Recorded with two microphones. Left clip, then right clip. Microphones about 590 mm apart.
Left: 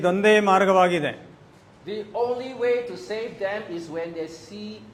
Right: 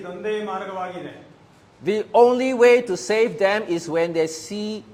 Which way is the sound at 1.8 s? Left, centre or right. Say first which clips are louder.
Right 11 dB; right.